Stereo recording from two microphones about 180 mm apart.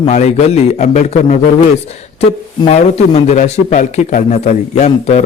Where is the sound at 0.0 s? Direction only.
35° left (ahead or behind).